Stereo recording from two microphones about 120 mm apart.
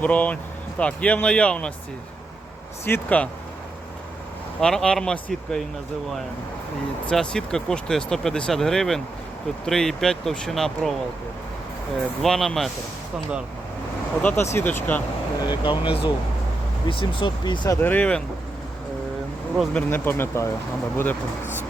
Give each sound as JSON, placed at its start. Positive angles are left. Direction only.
{"t": 0.0, "sound": "speech", "side_deg": 10}
{"t": 2.8, "sound": "speech", "side_deg": 15}
{"t": 4.6, "sound": "speech", "side_deg": 5}
{"t": 7.1, "sound": "speech", "side_deg": 5}
{"t": 12.2, "sound": "speech", "side_deg": 0}
{"t": 14.2, "sound": "speech", "side_deg": 10}
{"t": 15.4, "sound": "speech", "side_deg": 35}
{"t": 17.7, "sound": "speech", "side_deg": 15}
{"t": 19.7, "sound": "speech", "side_deg": 20}